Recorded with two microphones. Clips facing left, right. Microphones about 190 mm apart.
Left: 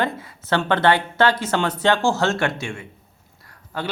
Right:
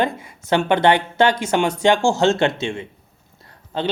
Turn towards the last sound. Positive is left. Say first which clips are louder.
# right 5 dB
turn(degrees=-20)  # may be behind; listen again after turning